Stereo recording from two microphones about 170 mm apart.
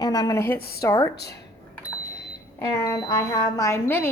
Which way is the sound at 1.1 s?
75° left (ahead or behind).